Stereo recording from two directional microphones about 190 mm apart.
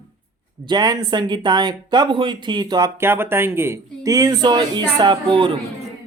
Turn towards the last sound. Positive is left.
turn(degrees=-25)  # may be behind; listen again after turning